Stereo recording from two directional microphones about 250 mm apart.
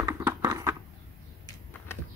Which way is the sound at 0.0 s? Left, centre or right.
Centre.